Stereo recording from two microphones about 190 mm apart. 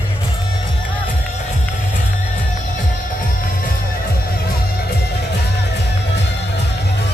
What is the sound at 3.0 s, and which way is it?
Music, 45° left (ahead or behind).